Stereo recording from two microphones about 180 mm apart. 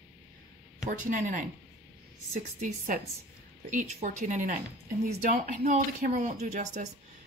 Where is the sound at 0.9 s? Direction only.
45° right (ahead or behind).